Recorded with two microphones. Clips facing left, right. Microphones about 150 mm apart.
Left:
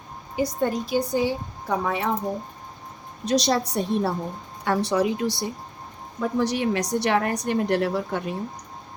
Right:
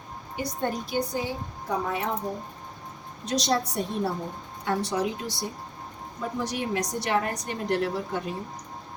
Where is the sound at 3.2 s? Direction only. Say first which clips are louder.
Left 4 dB; 70° left (ahead or behind).